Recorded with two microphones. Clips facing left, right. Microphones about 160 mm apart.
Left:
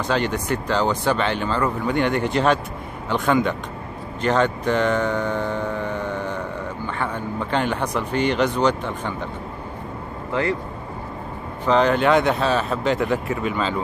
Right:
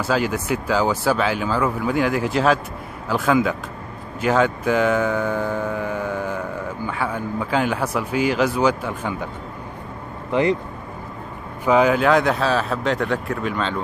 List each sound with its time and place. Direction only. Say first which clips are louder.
0.0 s speech: right 1 dB; 5° right (ahead or behind)
10.3 s speech: right 4 dB; 20° right (ahead or behind)
11.6 s speech: right 1 dB; 5° right (ahead or behind)